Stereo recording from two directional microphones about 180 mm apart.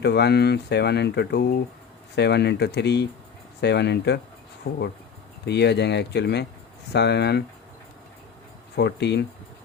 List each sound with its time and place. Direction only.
0.0 s speech: 70° left (ahead or behind)
8.7 s speech: 70° left (ahead or behind)